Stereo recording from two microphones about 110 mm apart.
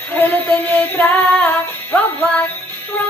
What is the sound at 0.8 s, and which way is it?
Music, 15° left (ahead or behind).